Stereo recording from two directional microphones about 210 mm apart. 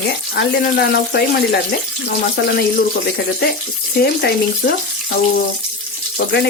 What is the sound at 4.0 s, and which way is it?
Speech, 50° left (ahead or behind).